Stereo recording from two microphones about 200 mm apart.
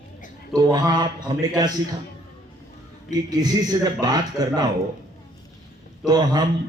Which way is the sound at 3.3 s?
20° right (ahead or behind).